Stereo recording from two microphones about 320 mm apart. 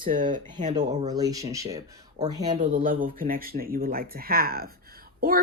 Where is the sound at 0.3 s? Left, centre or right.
Centre.